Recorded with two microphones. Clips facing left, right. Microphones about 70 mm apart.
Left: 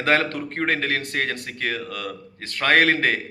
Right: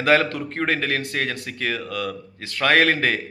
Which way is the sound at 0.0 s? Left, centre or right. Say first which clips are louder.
Right 2 dB; left.